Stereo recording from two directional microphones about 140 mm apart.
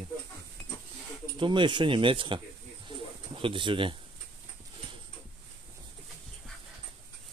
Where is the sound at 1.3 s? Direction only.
35° right (ahead or behind).